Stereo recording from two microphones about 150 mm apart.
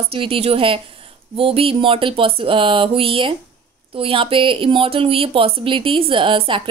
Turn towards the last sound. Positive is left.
turn(degrees=-35)  # may be behind; listen again after turning